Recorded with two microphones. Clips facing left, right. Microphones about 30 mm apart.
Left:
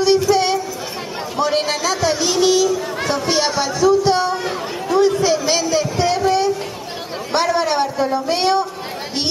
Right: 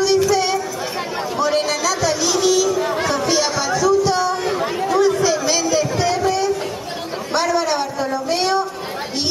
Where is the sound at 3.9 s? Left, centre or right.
Left.